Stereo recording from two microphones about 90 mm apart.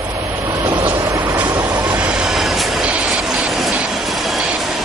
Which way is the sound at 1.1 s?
40° right (ahead or behind).